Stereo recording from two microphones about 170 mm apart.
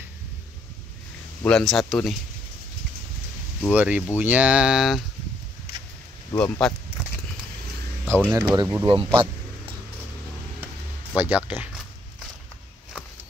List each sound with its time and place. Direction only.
1.4 s speech: 5° left (ahead or behind)
3.7 s speech: 10° right (ahead or behind)
6.3 s speech: 5° left (ahead or behind)
8.1 s speech: 10° right (ahead or behind)
8.8 s speech: 30° right (ahead or behind)
11.1 s speech: 10° right (ahead or behind)